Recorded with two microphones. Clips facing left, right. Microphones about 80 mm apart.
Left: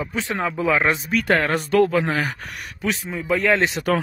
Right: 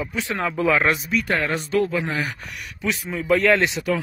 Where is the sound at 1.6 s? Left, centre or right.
Left.